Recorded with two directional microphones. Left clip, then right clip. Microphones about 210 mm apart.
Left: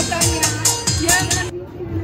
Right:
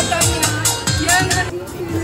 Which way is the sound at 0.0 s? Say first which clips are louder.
Right 2 dB; 50° right (ahead or behind).